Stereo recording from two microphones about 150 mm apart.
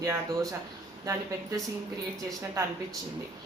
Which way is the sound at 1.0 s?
20° right (ahead or behind).